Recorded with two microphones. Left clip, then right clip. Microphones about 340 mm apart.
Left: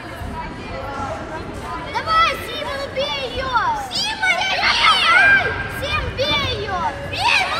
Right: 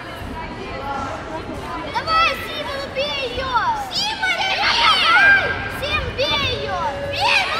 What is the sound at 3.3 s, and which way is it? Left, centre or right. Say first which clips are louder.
Children playing: left 1 dB; left.